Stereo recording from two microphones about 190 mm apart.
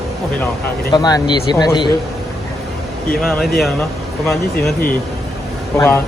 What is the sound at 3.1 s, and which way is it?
Speech, 5° left (ahead or behind).